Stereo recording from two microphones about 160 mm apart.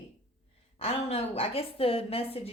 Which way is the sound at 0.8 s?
40° left (ahead or behind).